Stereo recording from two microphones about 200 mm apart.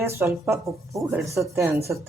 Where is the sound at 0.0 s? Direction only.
10° right (ahead or behind).